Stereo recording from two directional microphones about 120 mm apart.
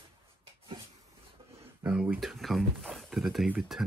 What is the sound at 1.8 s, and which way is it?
Speech, 10° right (ahead or behind).